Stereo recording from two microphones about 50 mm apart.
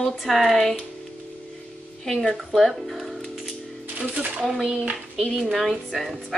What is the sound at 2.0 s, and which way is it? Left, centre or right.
A woman's voice, centre.